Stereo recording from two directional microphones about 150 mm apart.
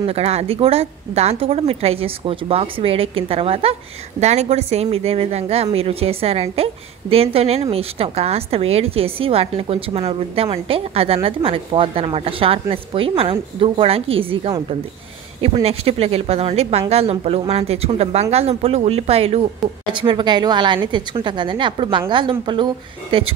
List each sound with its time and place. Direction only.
0.0 s a woman's voice: 40° right (ahead or behind)
19.9 s a woman's voice: 35° right (ahead or behind)